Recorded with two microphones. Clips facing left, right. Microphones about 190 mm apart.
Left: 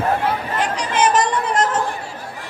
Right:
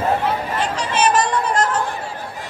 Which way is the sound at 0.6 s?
15° left (ahead or behind).